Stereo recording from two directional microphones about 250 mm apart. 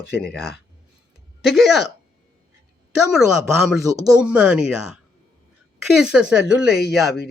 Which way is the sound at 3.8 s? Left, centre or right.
Centre.